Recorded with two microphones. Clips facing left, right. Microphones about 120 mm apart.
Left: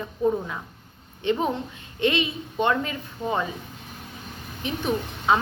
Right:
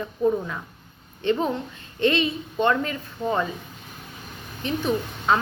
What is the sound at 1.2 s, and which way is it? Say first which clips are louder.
A woman's voice: right 1 dB; 15° left (ahead or behind).